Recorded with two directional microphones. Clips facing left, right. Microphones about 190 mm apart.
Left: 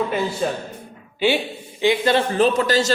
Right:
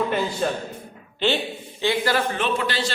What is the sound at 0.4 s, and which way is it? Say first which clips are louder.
Speech: left 1 dB; centre (ahead or behind).